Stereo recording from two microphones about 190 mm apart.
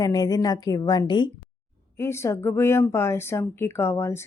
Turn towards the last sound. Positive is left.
turn(degrees=15)  # may be behind; listen again after turning